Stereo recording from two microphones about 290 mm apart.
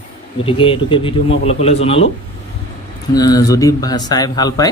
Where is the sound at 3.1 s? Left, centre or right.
Centre.